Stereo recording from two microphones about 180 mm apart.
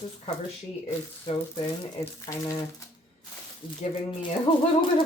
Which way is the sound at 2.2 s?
20° left (ahead or behind).